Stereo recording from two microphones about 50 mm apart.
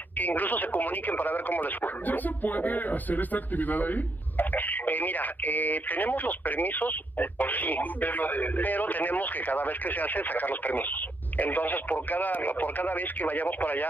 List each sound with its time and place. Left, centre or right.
0.2 s speech: left